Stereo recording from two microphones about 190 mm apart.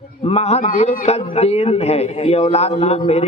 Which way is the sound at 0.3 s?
35° left (ahead or behind).